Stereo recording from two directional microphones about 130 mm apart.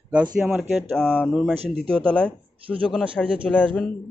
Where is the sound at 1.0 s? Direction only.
5° left (ahead or behind).